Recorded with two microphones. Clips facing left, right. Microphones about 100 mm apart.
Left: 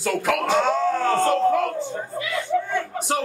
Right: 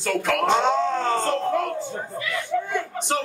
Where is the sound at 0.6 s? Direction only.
20° right (ahead or behind).